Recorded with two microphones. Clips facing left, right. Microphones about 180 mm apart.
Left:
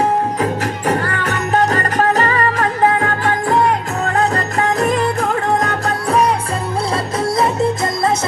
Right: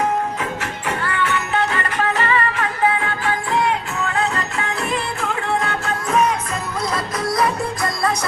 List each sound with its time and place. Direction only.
0.0 s music: 35° left (ahead or behind)